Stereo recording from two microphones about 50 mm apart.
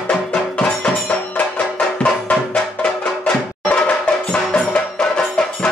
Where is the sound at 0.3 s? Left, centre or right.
Centre.